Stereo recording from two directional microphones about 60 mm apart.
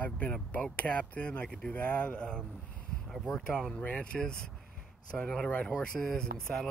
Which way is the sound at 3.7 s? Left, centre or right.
Left.